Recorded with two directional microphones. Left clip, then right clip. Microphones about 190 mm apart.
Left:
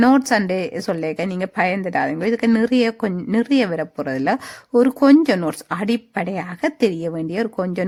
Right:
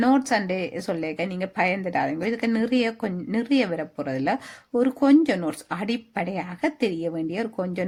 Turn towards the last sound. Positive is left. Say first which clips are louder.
# left 6 dB
turn(degrees=35)  # may be behind; listen again after turning